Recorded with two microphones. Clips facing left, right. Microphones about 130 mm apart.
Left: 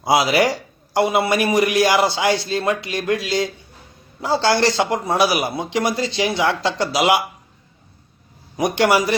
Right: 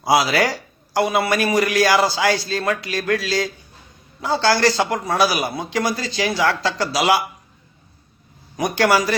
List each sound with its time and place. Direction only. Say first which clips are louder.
0.0 s a man's voice: left 1 dB; 25° left (ahead or behind)
8.5 s a man's voice: left 1 dB; 25° left (ahead or behind)